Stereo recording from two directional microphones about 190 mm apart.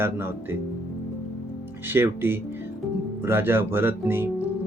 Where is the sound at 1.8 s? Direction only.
10° right (ahead or behind).